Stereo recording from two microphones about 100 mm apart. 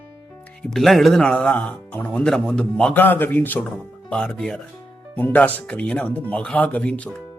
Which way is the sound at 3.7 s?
5° left (ahead or behind).